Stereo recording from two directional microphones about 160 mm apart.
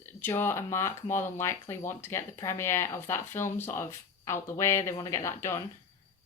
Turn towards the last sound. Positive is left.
turn(degrees=15)  # may be behind; listen again after turning